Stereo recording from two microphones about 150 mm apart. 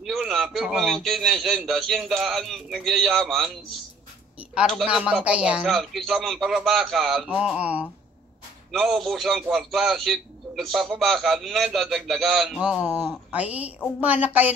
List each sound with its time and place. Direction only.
0.0 s a man's voice: centre (ahead or behind)
4.6 s a man's voice: centre (ahead or behind)